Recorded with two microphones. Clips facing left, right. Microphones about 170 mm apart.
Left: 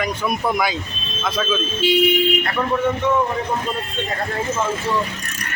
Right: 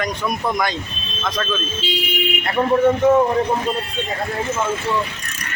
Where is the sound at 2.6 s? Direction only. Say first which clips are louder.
Right 10 dB; 40° right (ahead or behind).